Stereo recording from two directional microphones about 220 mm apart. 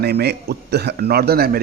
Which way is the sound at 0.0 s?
45° right (ahead or behind).